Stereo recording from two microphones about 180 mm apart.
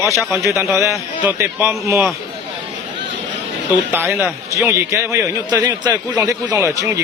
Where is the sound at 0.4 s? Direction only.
15° right (ahead or behind).